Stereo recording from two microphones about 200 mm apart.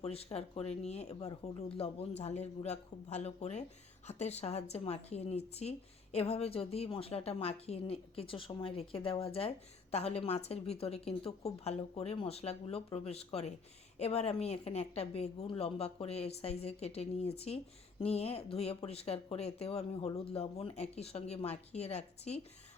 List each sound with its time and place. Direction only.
0.0 s a woman's voice: 30° left (ahead or behind)